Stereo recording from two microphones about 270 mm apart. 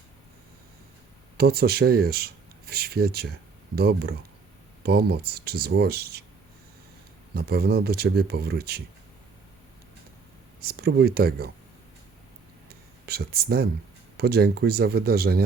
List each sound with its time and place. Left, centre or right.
1.4 s speech: right
7.3 s speech: right
10.6 s speech: right
12.6 s a sound: right
14.2 s speech: right